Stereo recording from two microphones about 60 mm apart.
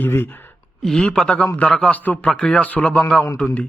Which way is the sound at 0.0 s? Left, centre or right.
Left.